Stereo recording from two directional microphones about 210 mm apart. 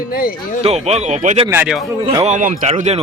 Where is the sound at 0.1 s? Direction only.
45° left (ahead or behind).